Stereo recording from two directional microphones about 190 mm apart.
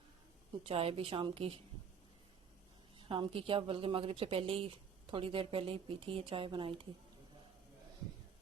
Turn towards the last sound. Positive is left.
turn(degrees=-25)  # may be behind; listen again after turning